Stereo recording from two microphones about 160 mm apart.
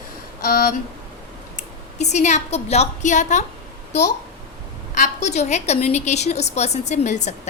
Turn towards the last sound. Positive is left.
turn(degrees=45)  # may be behind; listen again after turning